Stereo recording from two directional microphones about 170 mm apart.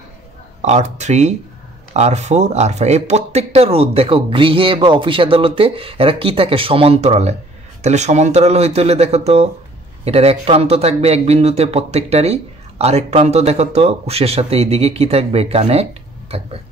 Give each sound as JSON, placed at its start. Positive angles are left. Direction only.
{"t": 0.6, "sound": "a man's voice", "side_deg": -40}